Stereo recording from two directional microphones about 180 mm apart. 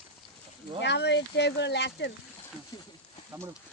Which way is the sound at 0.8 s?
70° left (ahead or behind).